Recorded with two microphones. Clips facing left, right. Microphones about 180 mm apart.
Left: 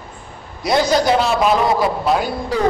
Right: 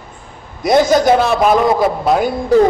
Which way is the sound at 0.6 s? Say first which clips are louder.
Right 5 dB; 50° right (ahead or behind).